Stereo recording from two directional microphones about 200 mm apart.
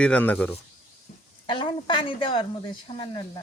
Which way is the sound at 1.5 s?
25° left (ahead or behind).